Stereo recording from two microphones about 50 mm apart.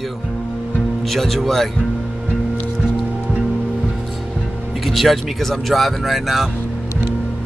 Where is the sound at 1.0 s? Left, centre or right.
Centre.